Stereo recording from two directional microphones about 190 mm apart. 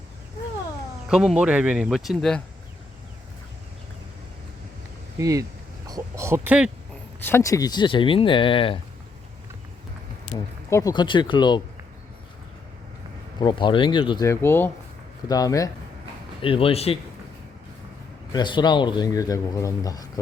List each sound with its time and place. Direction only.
1.1 s speech: 5° right (ahead or behind)
5.1 s speech: 15° right (ahead or behind)
7.2 s speech: 10° left (ahead or behind); by 8.8 s 25° left (ahead or behind)
10.7 s speech: 15° left (ahead or behind)
13.4 s speech: 25° left (ahead or behind)
14.3 s speech: 10° left (ahead or behind)
16.4 s speech: 30° left (ahead or behind)
18.3 s speech: 25° left (ahead or behind)